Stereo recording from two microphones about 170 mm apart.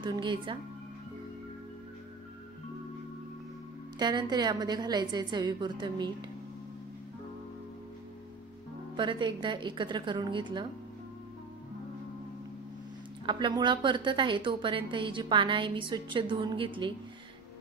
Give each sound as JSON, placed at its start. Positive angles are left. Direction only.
{"t": 0.0, "sound": "a woman's voice", "side_deg": -25}
{"t": 4.0, "sound": "a woman's voice", "side_deg": -25}
{"t": 8.9, "sound": "a woman's voice", "side_deg": -30}
{"t": 13.2, "sound": "a woman's voice", "side_deg": -25}